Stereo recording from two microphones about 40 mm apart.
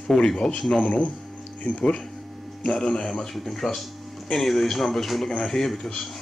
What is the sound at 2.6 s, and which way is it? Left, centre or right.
Speech, centre.